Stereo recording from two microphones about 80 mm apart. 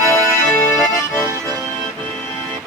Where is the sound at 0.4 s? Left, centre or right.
Left.